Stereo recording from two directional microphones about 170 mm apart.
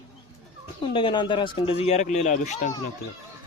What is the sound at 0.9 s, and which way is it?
Speech, 25° left (ahead or behind).